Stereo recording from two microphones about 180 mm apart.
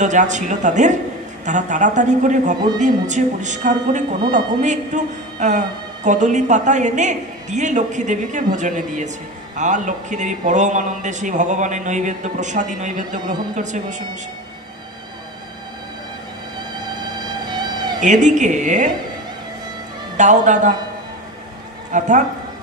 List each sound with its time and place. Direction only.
0.0 s speech: 40° right (ahead or behind)
17.5 s cat: 25° right (ahead or behind)
18.0 s speech: 45° right (ahead or behind)
20.2 s speech: 45° right (ahead or behind)
21.9 s speech: 45° right (ahead or behind)